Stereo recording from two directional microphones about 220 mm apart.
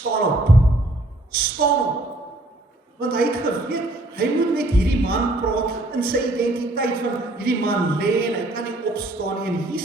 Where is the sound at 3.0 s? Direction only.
45° right (ahead or behind).